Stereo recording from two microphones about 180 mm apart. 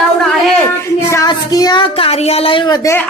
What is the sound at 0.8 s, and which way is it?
Speech, 20° left (ahead or behind).